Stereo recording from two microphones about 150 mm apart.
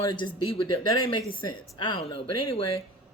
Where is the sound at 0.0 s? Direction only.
30° left (ahead or behind).